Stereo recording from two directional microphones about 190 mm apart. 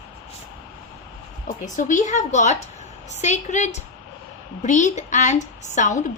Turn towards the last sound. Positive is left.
turn(degrees=40)  # may be behind; listen again after turning